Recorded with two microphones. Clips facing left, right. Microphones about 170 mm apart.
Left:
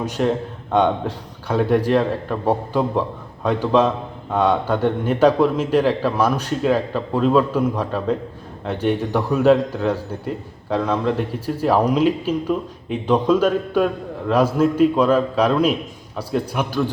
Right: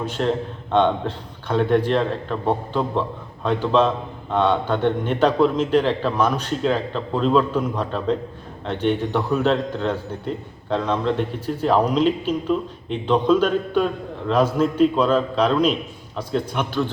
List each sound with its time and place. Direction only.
0.2 s a man's voice: 5° left (ahead or behind)